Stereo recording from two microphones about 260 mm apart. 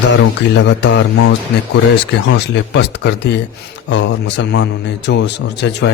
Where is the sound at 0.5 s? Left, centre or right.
Left.